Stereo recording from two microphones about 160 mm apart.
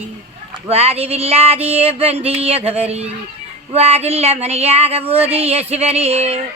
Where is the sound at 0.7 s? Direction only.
40° right (ahead or behind).